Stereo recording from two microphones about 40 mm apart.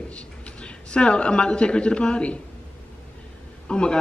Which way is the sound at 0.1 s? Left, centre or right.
Left.